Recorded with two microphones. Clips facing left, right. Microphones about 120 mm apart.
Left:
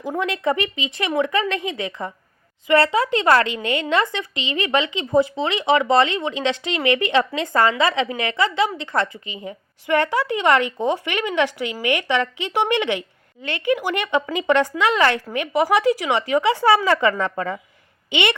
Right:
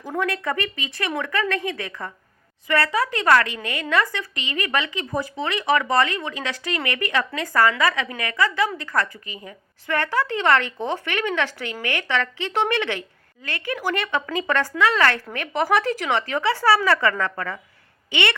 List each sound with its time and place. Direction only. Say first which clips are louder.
0.0 s a woman's voice: left 3 dB; 15° left (ahead or behind)